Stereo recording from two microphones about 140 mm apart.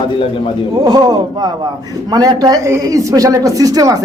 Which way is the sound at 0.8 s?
30° right (ahead or behind).